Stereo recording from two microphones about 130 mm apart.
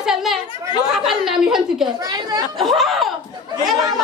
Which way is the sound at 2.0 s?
30° right (ahead or behind).